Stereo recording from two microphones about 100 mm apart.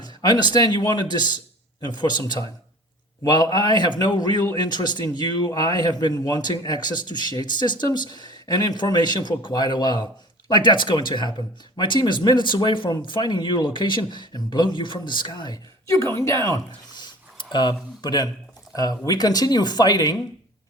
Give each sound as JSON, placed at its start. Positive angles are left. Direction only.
{"t": 0.0, "sound": "a man's voice", "side_deg": 40}
{"t": 16.2, "sound": "speech", "side_deg": 30}
{"t": 16.9, "sound": "a sound", "side_deg": 50}
{"t": 18.7, "sound": "speech", "side_deg": 40}